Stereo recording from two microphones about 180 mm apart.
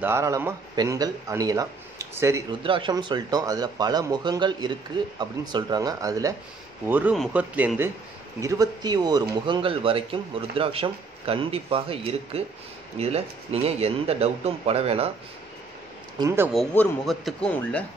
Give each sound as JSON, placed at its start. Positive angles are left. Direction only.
{"t": 0.0, "sound": "speech", "side_deg": -15}
{"t": 2.6, "sound": "speech", "side_deg": -30}
{"t": 8.4, "sound": "a man's voice", "side_deg": -20}
{"t": 16.2, "sound": "speech", "side_deg": -15}
{"t": 16.5, "sound": "speech", "side_deg": 5}